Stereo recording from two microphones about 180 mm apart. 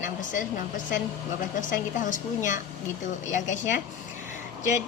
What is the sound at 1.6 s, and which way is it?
A woman's voice, 45° left (ahead or behind).